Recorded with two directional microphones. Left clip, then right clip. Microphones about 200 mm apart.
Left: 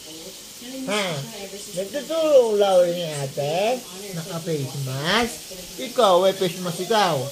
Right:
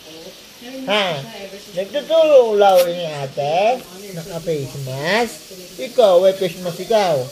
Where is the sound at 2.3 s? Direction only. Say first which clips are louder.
Right 3 dB; 15° left (ahead or behind).